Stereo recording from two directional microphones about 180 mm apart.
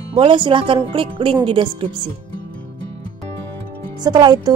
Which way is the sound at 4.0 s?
25° right (ahead or behind).